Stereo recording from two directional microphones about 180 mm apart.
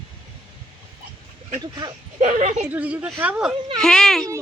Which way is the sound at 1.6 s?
25° right (ahead or behind).